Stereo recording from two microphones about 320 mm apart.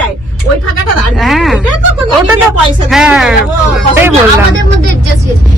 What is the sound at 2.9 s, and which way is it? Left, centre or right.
Speech, centre.